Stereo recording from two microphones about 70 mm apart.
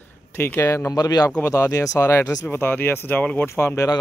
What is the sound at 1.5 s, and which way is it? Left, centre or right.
Speech, left.